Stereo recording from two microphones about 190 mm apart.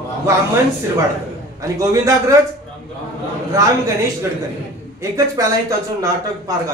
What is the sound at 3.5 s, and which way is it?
Speech, 15° right (ahead or behind).